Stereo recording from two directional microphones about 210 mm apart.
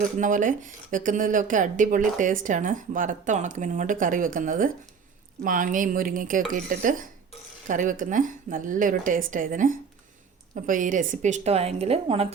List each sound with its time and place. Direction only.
0.2 s speech: 40° right (ahead or behind)